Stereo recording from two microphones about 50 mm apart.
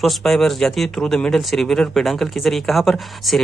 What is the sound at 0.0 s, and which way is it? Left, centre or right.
Speech, centre.